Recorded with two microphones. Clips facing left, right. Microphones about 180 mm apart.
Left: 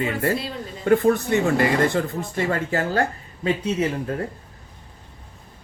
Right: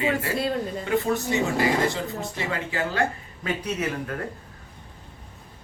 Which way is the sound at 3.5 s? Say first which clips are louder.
Left 5 dB; 25° left (ahead or behind).